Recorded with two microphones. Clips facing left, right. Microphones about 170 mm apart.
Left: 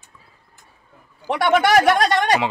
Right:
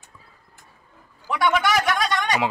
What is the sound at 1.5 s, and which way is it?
Speech, 50° left (ahead or behind).